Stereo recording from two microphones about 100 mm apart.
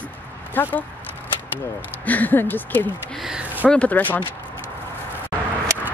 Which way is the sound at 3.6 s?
15° left (ahead or behind).